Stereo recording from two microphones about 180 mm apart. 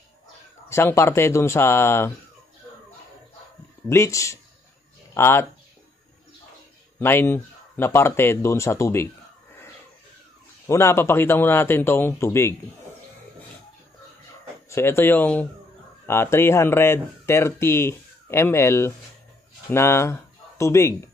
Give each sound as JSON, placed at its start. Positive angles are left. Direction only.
{"t": 0.7, "sound": "speech", "side_deg": 15}
{"t": 3.9, "sound": "speech", "side_deg": 15}
{"t": 7.0, "sound": "speech", "side_deg": 15}
{"t": 10.7, "sound": "speech", "side_deg": 15}
{"t": 14.7, "sound": "speech", "side_deg": 15}